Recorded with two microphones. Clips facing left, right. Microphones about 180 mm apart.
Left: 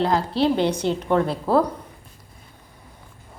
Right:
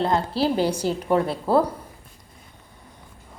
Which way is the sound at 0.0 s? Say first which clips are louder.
Left 2 dB; centre (ahead or behind).